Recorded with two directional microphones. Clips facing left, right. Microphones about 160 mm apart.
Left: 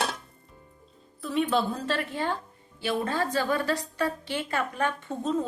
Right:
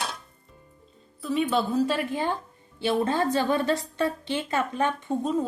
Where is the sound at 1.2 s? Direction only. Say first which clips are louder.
Right 1 dB; centre (ahead or behind).